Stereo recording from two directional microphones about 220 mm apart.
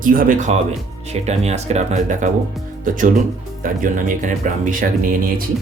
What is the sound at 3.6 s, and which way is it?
Speech, 35° right (ahead or behind).